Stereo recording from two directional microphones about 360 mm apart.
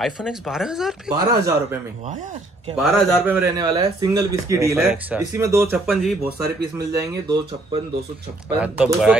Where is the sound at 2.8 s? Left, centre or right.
Centre.